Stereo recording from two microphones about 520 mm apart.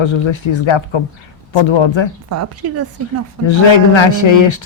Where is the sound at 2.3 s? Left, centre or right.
Right.